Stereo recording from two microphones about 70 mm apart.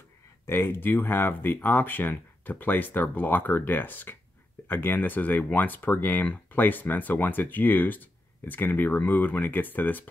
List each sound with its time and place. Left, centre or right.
0.5 s speech: left